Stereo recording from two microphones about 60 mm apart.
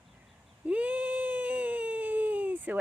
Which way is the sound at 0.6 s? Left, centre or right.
Right.